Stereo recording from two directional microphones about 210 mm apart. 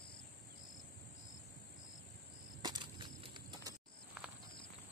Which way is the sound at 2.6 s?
20° right (ahead or behind).